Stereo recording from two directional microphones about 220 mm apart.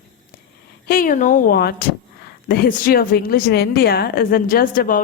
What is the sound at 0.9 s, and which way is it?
A woman's voice, 40° left (ahead or behind).